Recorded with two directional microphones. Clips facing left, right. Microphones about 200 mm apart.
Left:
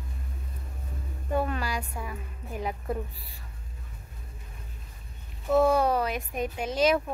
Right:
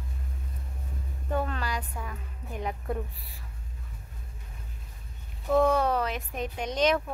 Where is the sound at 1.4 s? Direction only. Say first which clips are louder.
Left 3 dB; 10° left (ahead or behind).